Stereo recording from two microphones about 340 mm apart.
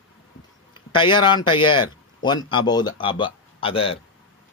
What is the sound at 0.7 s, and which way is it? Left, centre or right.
Speech, centre.